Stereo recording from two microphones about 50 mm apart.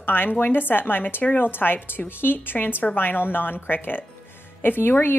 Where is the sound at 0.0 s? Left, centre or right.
Left.